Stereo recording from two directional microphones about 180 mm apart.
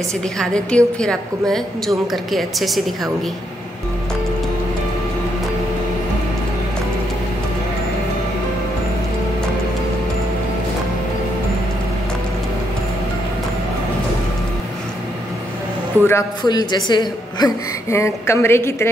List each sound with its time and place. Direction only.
0.4 s a woman's voice: 5° left (ahead or behind)
16.1 s a man's voice: 20° left (ahead or behind)